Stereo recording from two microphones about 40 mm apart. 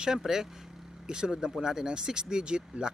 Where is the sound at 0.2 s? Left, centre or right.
Centre.